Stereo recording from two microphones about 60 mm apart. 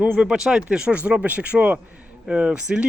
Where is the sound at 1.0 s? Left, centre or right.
Right.